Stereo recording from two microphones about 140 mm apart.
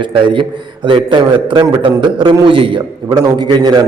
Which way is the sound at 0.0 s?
35° right (ahead or behind).